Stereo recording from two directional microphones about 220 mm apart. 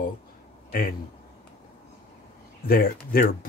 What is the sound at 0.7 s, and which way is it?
Speech, 40° left (ahead or behind).